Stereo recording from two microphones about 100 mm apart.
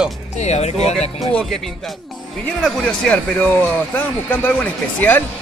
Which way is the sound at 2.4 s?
5° left (ahead or behind).